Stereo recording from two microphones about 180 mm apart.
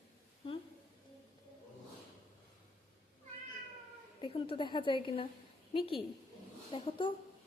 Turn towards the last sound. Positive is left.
turn(degrees=30)  # may be behind; listen again after turning